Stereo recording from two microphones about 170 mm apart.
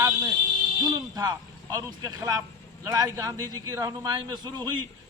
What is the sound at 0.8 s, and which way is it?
A man's voice, 25° right (ahead or behind).